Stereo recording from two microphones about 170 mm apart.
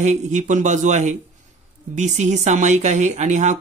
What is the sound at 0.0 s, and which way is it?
Speech, 45° right (ahead or behind).